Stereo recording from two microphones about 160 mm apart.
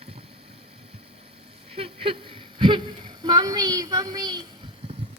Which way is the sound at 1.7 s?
35° right (ahead or behind).